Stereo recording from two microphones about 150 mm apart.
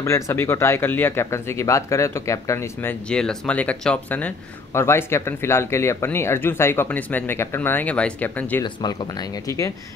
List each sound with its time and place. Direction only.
0.0 s speech: 15° left (ahead or behind)
8.6 s speech: 30° left (ahead or behind)